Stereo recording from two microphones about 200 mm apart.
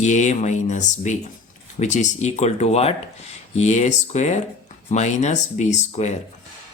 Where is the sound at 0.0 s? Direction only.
35° left (ahead or behind).